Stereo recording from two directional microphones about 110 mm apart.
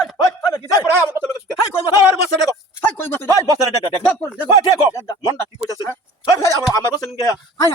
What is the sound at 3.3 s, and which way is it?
Speech, 35° right (ahead or behind).